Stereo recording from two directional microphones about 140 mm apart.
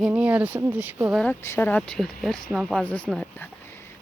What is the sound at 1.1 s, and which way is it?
Speech, 10° left (ahead or behind).